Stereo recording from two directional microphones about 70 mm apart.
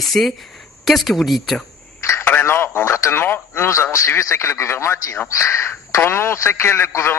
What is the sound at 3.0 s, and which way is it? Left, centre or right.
A man's voice, left.